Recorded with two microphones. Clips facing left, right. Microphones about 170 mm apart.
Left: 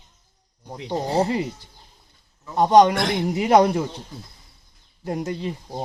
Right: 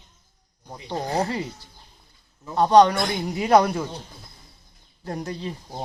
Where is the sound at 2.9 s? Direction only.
90° left.